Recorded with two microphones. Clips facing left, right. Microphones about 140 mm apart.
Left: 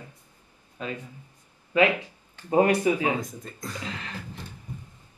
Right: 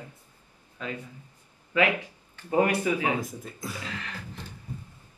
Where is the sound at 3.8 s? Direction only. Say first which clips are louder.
Left 2 dB; 15° left (ahead or behind).